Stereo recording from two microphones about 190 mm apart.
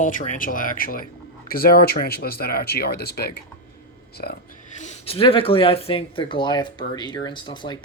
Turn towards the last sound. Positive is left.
turn(degrees=25)  # may be behind; listen again after turning